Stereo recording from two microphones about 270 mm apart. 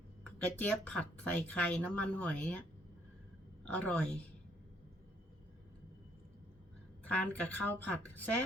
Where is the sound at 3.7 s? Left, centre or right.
Centre.